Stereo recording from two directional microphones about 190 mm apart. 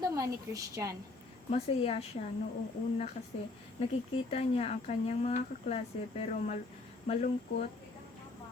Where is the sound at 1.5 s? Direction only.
35° left (ahead or behind).